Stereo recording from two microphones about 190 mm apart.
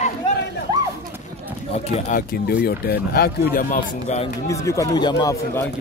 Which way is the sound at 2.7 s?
55° left (ahead or behind).